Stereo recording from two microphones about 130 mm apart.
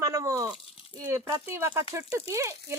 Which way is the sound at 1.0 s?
20° right (ahead or behind).